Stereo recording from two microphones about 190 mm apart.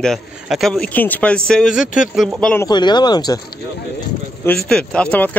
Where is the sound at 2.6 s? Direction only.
20° left (ahead or behind).